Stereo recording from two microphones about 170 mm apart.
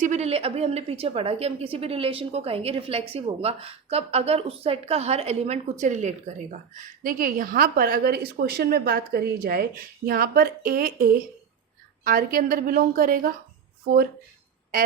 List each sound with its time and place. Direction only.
0.0 s a woman's voice: 40° right (ahead or behind)